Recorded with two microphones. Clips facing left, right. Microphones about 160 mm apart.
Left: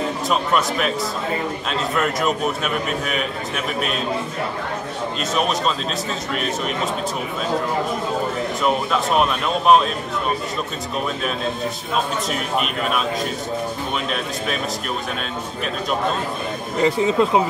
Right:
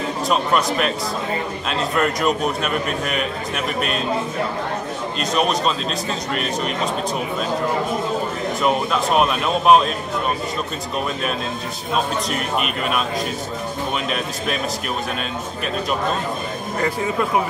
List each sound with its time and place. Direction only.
0.3 s a man's voice: centre (ahead or behind)
5.3 s a man's voice: centre (ahead or behind)
8.6 s a man's voice: centre (ahead or behind)
12.3 s a man's voice: centre (ahead or behind)
16.7 s speech: 20° left (ahead or behind)